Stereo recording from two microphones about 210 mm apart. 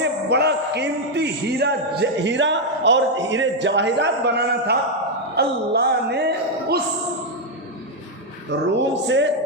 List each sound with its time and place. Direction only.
0.0 s a man's voice: 55° right (ahead or behind)
8.4 s a man's voice: 60° right (ahead or behind)